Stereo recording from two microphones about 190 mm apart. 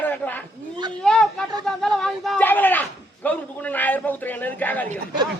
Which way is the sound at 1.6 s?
5° left (ahead or behind).